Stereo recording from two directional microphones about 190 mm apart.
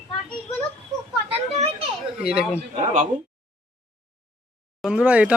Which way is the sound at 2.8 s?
40° right (ahead or behind).